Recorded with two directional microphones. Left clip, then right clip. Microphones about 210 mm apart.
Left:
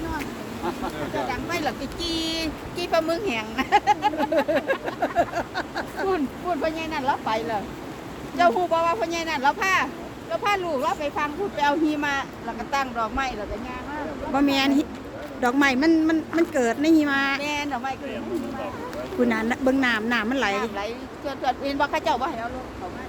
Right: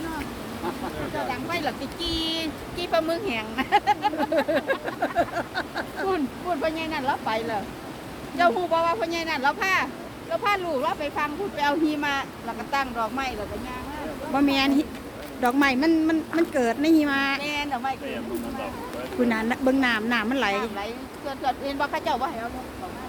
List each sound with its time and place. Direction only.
1.3 s speech: 10° left (ahead or behind)
4.4 s vehicle: 5° left (ahead or behind)
8.4 s speech: 10° left (ahead or behind)
14.3 s vehicle: 5° right (ahead or behind)
16.4 s speech: 5° right (ahead or behind)
17.4 s speech: 15° left (ahead or behind)
19.3 s speech: 10° right (ahead or behind)
20.6 s speech: 10° left (ahead or behind)